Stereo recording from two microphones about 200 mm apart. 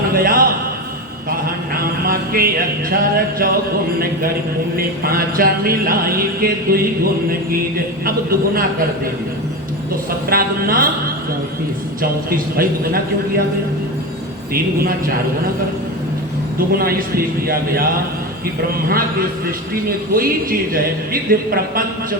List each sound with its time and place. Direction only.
0.1 s a sound: 45° right (ahead or behind)
1.5 s music: 45° right (ahead or behind)
4.8 s speech: 45° right (ahead or behind)
10.2 s speech: 45° right (ahead or behind)
12.3 s speech: 45° right (ahead or behind)
14.5 s speech: 45° right (ahead or behind)
16.6 s speech: 45° right (ahead or behind)
20.1 s speech: 45° right (ahead or behind)